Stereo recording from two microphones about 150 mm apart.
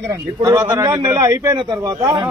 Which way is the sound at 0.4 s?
25° right (ahead or behind).